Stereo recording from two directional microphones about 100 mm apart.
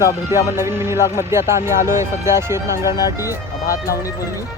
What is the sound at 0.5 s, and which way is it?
Speech, 25° right (ahead or behind).